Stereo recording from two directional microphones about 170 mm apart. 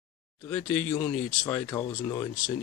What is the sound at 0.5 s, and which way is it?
Speech, 10° left (ahead or behind).